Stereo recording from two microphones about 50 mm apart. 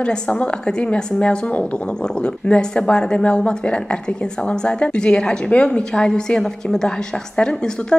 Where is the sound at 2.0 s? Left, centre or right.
Left.